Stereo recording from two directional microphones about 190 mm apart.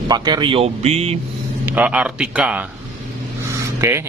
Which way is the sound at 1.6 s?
10° right (ahead or behind).